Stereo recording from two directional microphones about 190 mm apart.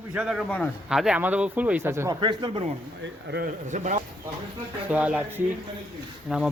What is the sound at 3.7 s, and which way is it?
Speech, 40° right (ahead or behind).